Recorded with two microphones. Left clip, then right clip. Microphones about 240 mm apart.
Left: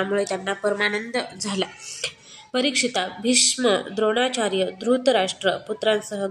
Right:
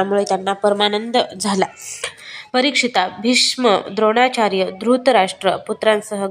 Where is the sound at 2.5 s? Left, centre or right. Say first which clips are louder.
Right 6 dB; centre.